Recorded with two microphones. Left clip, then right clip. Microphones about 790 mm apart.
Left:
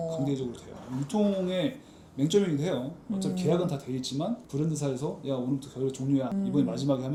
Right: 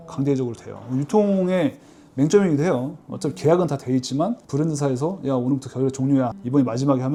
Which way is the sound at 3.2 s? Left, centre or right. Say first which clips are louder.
Right 9 dB; right.